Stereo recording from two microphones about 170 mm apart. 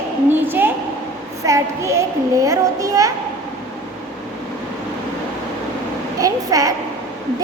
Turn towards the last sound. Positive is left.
turn(degrees=-20)  # may be behind; listen again after turning